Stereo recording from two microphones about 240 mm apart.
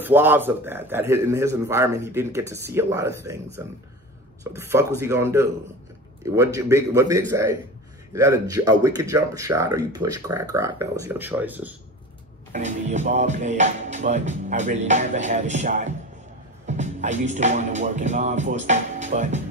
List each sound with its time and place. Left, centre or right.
0.0 s a man's voice: centre
12.5 s music: right